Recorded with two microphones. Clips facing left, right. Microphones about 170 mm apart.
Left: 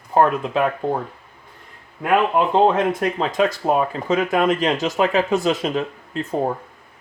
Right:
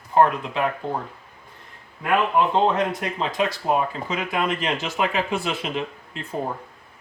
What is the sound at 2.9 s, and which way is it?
Speech, 50° left (ahead or behind).